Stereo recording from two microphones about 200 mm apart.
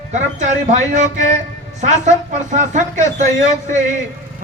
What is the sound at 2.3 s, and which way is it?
A man's voice, 35° right (ahead or behind).